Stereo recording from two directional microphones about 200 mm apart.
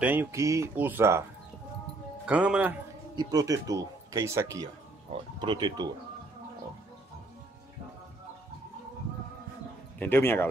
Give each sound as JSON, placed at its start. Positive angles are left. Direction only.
{"t": 0.0, "sound": "speech", "side_deg": -10}
{"t": 2.2, "sound": "speech", "side_deg": -5}
{"t": 3.2, "sound": "speech", "side_deg": -20}
{"t": 9.9, "sound": "a man's voice", "side_deg": 10}